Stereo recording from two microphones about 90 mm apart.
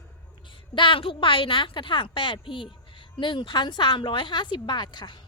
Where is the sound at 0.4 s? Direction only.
70° left (ahead or behind).